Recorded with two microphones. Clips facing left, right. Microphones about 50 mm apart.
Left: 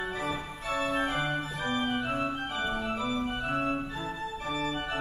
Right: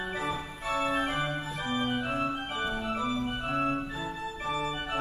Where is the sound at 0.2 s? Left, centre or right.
Centre.